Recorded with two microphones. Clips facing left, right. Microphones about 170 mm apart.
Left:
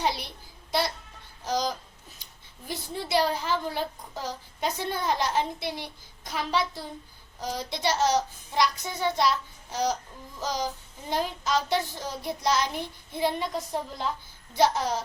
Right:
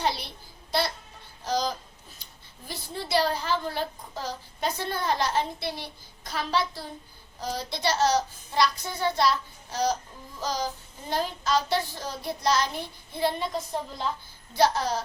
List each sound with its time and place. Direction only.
0.0 s a woman's voice: 15° left (ahead or behind)
1.5 s a woman's voice: 15° left (ahead or behind)
10.4 s a woman's voice: 15° left (ahead or behind)